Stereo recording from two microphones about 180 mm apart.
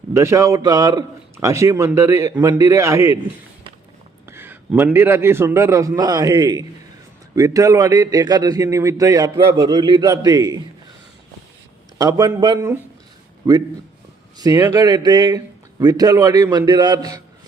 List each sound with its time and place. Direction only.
0.1 s a man's voice: 15° right (ahead or behind)
4.3 s a man's voice: 10° right (ahead or behind)
11.9 s a man's voice: 20° right (ahead or behind)